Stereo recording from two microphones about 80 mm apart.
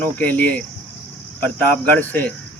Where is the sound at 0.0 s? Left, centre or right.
Centre.